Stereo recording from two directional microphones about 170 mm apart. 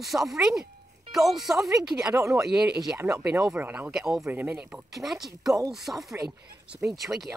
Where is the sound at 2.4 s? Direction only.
5° right (ahead or behind).